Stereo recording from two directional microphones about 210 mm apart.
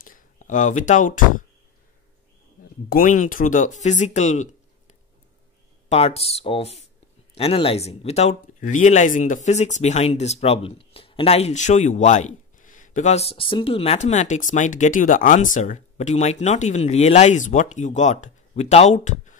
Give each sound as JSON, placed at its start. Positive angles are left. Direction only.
{"t": 0.0, "sound": "speech", "side_deg": 40}
{"t": 2.9, "sound": "speech", "side_deg": 40}